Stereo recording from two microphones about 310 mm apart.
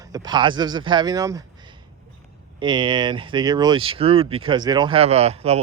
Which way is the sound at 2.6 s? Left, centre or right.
Centre.